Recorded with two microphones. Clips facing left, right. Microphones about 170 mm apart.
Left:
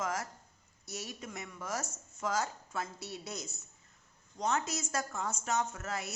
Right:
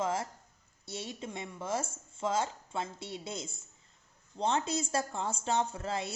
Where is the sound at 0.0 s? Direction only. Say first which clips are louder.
Right 4 dB; 30° right (ahead or behind).